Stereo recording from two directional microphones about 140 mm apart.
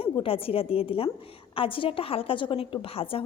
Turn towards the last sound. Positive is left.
turn(degrees=40)  # may be behind; listen again after turning